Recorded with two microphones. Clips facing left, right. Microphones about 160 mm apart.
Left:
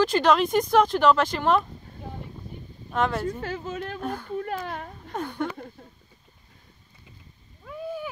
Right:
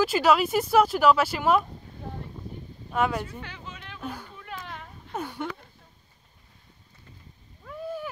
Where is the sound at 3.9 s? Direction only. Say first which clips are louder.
Left 5 dB; 5° right (ahead or behind).